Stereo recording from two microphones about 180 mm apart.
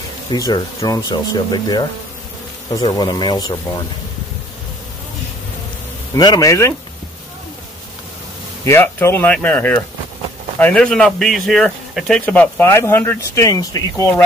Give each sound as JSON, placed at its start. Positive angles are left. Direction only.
{"t": 0.3, "sound": "speech", "side_deg": 25}
{"t": 6.1, "sound": "speech", "side_deg": 20}
{"t": 8.6, "sound": "speech", "side_deg": 15}